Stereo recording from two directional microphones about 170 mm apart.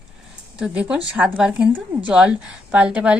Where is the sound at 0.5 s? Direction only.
5° right (ahead or behind).